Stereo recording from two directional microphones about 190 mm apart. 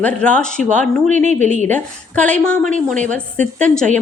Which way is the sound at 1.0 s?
40° right (ahead or behind).